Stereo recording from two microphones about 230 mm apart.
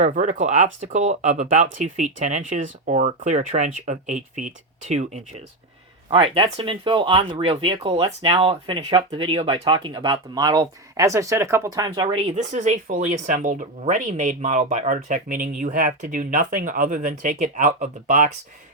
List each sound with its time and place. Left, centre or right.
0.0 s speech: right
12.3 s speech: right